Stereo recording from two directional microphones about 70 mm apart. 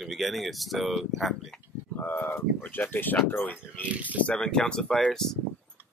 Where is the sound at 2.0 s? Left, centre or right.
Left.